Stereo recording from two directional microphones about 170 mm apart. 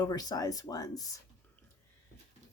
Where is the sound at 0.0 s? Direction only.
20° left (ahead or behind).